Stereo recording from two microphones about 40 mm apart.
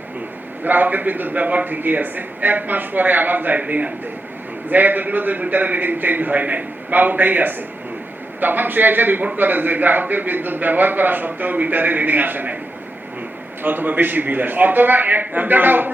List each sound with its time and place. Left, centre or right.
0.6 s a man's voice: right
4.7 s a man's voice: right
13.6 s a man's voice: right